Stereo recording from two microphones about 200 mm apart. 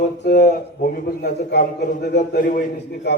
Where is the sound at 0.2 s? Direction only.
50° left (ahead or behind).